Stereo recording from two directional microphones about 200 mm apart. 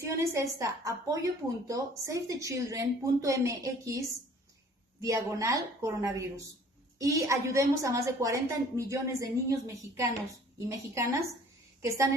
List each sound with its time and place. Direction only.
0.0 s a woman's voice: 15° right (ahead or behind)
5.0 s a woman's voice: 15° right (ahead or behind)